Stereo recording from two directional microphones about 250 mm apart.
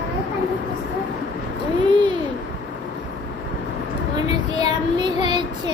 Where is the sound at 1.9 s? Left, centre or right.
Centre.